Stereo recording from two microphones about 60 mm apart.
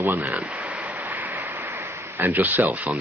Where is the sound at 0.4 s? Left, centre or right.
Right.